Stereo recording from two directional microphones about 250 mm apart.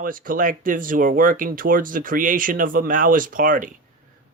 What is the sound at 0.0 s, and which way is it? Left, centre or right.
Speech, right.